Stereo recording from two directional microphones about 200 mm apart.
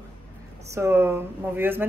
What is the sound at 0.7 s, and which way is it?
Speech, 10° right (ahead or behind).